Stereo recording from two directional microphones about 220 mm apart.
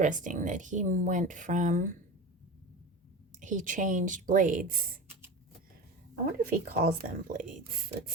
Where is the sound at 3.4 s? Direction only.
35° right (ahead or behind).